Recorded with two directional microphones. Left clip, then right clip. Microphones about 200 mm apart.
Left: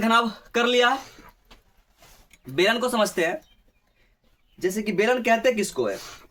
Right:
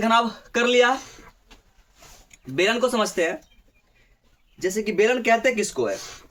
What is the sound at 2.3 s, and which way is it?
Speech, 20° left (ahead or behind).